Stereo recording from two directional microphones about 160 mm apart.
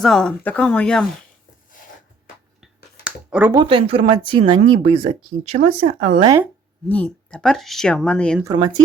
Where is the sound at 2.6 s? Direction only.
5° right (ahead or behind).